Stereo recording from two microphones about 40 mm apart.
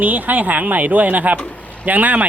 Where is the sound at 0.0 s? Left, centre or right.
Right.